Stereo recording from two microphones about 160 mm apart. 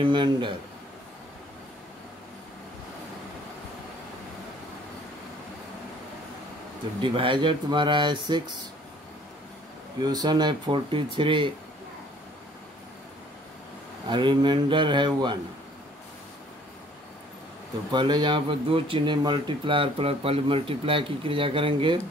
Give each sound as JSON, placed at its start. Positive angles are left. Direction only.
{"t": 0.0, "sound": "speech", "side_deg": -30}
{"t": 7.0, "sound": "speech", "side_deg": -30}
{"t": 10.0, "sound": "speech", "side_deg": -25}
{"t": 14.0, "sound": "speech", "side_deg": -30}
{"t": 17.9, "sound": "speech", "side_deg": -30}